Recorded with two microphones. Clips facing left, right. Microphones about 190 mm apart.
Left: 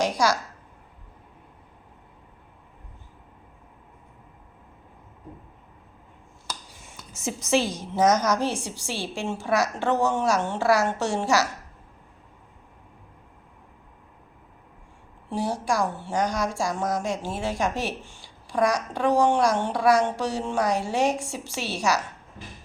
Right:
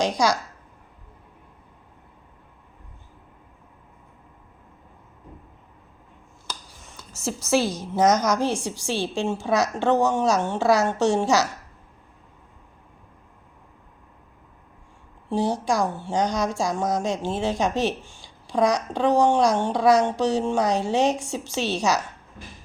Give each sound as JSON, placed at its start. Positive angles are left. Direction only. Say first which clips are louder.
{"t": 0.0, "sound": "a woman's voice", "louder": "right 1 dB", "side_deg": -15}
{"t": 7.3, "sound": "a woman's voice", "louder": "right 1 dB", "side_deg": 15}
{"t": 8.2, "sound": "a woman's voice", "louder": "right 2 dB", "side_deg": -15}
{"t": 15.3, "sound": "a woman's voice", "louder": "right 3 dB", "side_deg": -20}